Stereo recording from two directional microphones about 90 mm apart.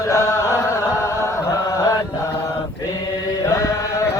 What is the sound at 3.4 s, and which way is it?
Chant, 35° left (ahead or behind).